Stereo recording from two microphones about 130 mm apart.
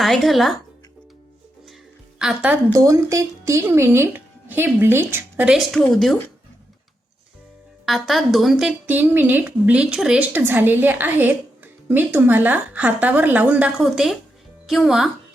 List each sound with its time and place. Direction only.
0.0 s speech: centre (ahead or behind)
2.1 s a woman's voice: 5° right (ahead or behind)
2.7 s a woman's voice: 25° right (ahead or behind)
5.5 s speech: centre (ahead or behind)
7.9 s a woman's voice: centre (ahead or behind)